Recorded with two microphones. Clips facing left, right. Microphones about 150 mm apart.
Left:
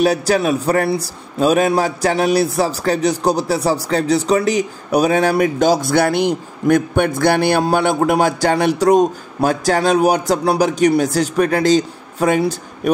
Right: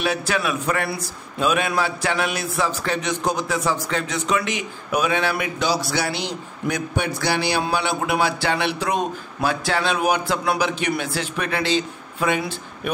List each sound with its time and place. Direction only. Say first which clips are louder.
0.0 s a man's voice: left 8 dB; 40° left (ahead or behind)